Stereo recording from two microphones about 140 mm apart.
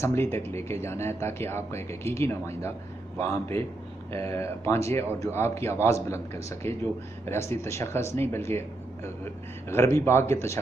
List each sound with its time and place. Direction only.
0.0 s a man's voice: 20° left (ahead or behind)